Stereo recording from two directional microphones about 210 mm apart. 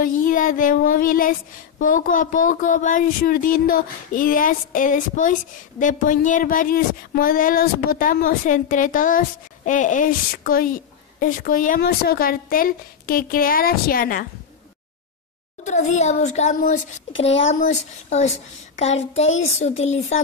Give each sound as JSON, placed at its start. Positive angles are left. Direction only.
{"t": 0.0, "sound": "a woman's voice", "side_deg": 40}
{"t": 15.6, "sound": "speech", "side_deg": 35}
{"t": 18.8, "sound": "child singing", "side_deg": 30}
{"t": 19.6, "sound": "speech", "side_deg": 30}